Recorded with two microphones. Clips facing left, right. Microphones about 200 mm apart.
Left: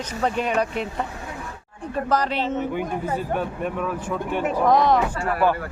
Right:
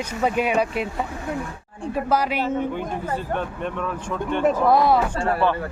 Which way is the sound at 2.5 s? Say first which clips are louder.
Even; 10° left (ahead or behind).